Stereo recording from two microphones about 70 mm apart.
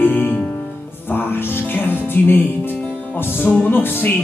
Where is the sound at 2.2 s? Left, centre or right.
Left.